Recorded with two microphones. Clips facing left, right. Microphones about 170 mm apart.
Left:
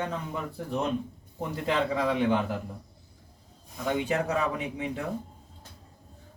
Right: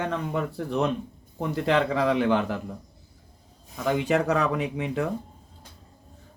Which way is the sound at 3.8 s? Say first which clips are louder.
Right 4 dB; 90° right.